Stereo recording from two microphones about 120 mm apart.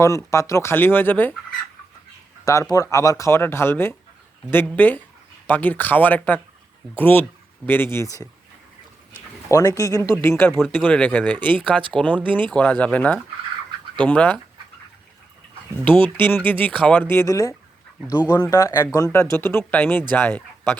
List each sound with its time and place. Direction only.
0.0 s speech: 25° left (ahead or behind)
2.4 s speech: 25° left (ahead or behind)
9.5 s speech: 30° left (ahead or behind); by 14.3 s 10° left (ahead or behind)
16.0 s speech: 15° left (ahead or behind)
18.5 s speech: 30° left (ahead or behind)